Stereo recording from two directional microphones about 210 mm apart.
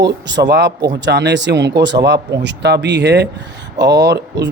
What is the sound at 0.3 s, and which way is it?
Speech, 55° right (ahead or behind).